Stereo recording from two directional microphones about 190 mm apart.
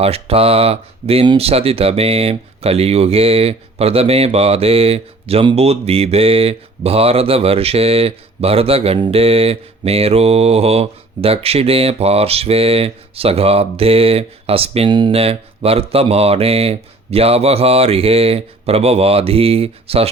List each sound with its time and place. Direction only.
0.0 s speech: 30° right (ahead or behind)